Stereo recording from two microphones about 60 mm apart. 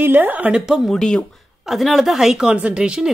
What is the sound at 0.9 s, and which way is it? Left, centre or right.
Speech, centre.